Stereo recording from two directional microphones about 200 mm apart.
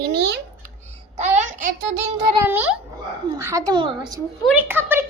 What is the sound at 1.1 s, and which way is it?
Speech, 35° right (ahead or behind).